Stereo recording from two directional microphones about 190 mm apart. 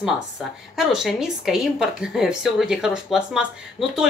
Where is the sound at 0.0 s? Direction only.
Centre (ahead or behind).